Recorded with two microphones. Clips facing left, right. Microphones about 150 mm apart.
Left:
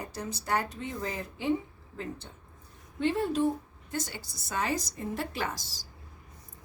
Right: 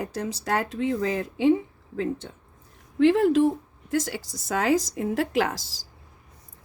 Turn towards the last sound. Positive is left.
turn(degrees=-90)